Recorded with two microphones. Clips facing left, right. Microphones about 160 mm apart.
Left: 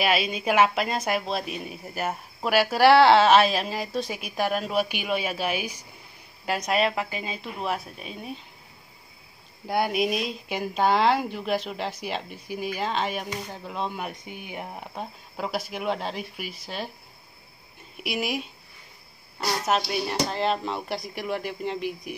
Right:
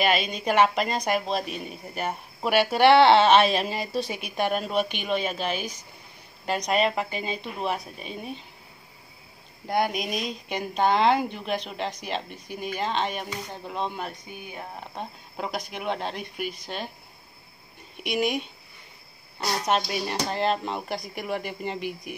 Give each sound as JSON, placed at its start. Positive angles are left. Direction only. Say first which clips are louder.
{"t": 0.0, "sound": "a woman's voice", "louder": "even", "side_deg": 5}
{"t": 9.7, "sound": "a woman's voice", "louder": "left 2 dB", "side_deg": 5}
{"t": 14.2, "sound": "speech", "louder": "left 2 dB", "side_deg": 20}
{"t": 15.0, "sound": "a woman's voice", "louder": "left 1 dB", "side_deg": 0}
{"t": 17.9, "sound": "a woman's voice", "louder": "right 3 dB", "side_deg": 5}